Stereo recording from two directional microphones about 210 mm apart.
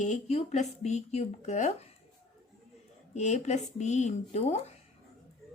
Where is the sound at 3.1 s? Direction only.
35° left (ahead or behind).